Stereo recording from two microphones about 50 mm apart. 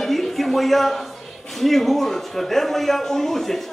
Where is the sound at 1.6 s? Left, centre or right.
Centre.